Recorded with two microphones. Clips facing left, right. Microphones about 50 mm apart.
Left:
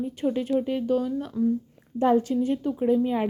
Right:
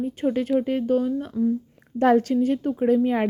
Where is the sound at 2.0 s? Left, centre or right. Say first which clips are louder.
Right 3 dB; right.